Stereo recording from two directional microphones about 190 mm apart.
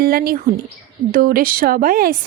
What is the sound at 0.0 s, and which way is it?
A woman's voice, 50° right (ahead or behind).